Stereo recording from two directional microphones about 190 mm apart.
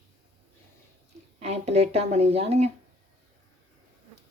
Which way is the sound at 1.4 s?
35° right (ahead or behind).